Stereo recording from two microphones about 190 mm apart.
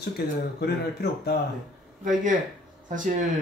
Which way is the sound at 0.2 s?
60° left (ahead or behind).